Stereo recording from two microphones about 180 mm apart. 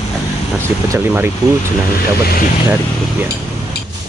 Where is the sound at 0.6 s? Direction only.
15° right (ahead or behind).